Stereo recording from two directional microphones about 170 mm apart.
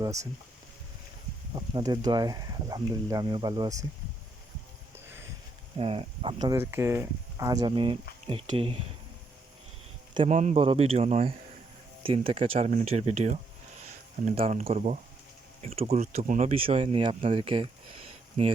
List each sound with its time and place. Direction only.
0.0 s speech: 20° right (ahead or behind)
1.5 s speech: 25° right (ahead or behind)
5.7 s speech: 35° right (ahead or behind)
10.2 s speech: 45° right (ahead or behind)
10.6 s speech: 35° right (ahead or behind)